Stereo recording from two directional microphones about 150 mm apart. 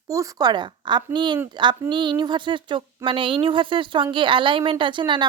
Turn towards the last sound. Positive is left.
turn(degrees=-30)  # may be behind; listen again after turning